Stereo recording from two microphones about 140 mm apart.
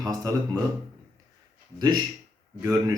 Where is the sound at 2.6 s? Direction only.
25° right (ahead or behind).